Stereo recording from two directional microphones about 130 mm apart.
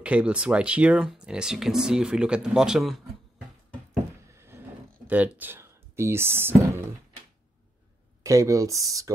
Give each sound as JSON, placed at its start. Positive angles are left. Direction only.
{"t": 0.0, "sound": "speech", "side_deg": -10}
{"t": 4.3, "sound": "a sound", "side_deg": -20}
{"t": 5.0, "sound": "speech", "side_deg": -10}
{"t": 8.2, "sound": "speech", "side_deg": -25}